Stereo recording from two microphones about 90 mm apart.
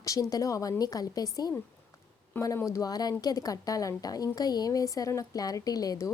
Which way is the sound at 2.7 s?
40° left (ahead or behind).